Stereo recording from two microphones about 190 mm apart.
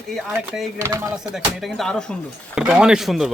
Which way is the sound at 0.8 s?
15° right (ahead or behind).